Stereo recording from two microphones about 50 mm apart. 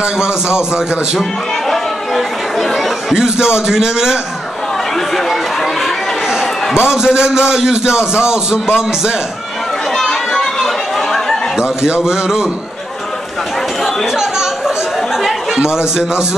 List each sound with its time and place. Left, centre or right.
0.0 s a man's voice: centre
3.1 s a man's voice: centre
6.9 s a man's voice: centre
9.9 s chatter: centre
11.5 s a man's voice: centre
15.2 s chatter: centre